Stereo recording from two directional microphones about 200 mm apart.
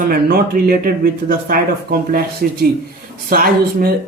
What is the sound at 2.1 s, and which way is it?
Speech, 45° right (ahead or behind).